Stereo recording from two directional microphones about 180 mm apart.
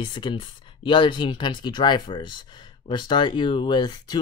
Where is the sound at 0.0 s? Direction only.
30° left (ahead or behind).